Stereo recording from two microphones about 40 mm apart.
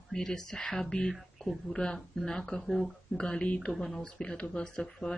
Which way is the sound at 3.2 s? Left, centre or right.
Left.